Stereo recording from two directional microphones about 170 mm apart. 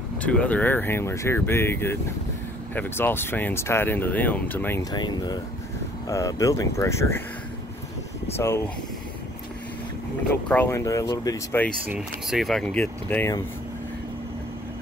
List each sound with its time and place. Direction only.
0.2 s speech: 10° left (ahead or behind)
4.9 s speech: 25° left (ahead or behind)
8.4 s speech: 15° left (ahead or behind)
10.5 s speech: 15° left (ahead or behind)
11.8 s speech: 5° right (ahead or behind); by 13.4 s 10° left (ahead or behind)